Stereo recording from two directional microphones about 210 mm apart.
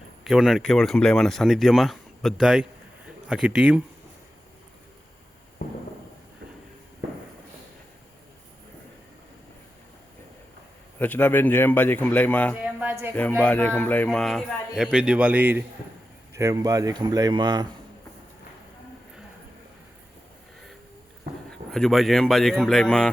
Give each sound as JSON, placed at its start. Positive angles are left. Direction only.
{"t": 0.3, "sound": "speech", "side_deg": 0}
{"t": 10.9, "sound": "speech", "side_deg": 10}
{"t": 12.6, "sound": "music", "side_deg": -10}
{"t": 13.4, "sound": "speech", "side_deg": 5}
{"t": 21.5, "sound": "speech", "side_deg": 0}